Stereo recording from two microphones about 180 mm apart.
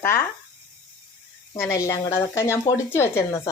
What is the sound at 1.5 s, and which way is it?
Speech, 15° left (ahead or behind).